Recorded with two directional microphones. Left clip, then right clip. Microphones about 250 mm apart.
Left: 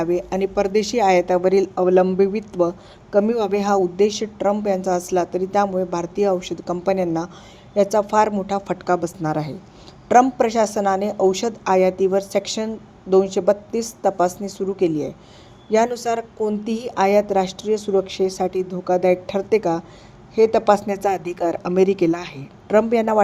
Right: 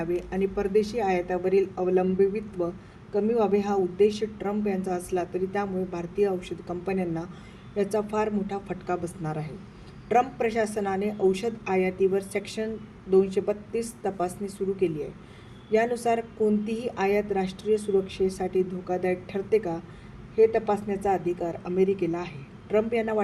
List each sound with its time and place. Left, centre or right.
0.0 s a woman's voice: left